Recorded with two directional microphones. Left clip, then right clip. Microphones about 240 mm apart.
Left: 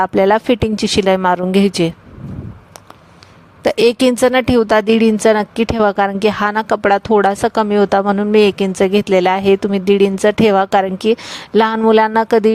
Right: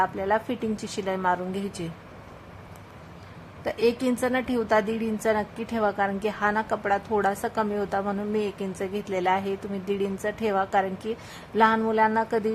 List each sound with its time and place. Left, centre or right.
0.0 s a woman's voice: left
3.6 s a woman's voice: left